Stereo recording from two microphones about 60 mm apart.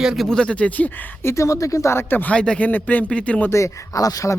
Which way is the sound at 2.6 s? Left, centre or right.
Left.